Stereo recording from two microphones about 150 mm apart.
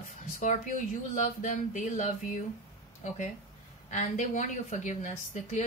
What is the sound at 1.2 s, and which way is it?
Speech, 55° left (ahead or behind).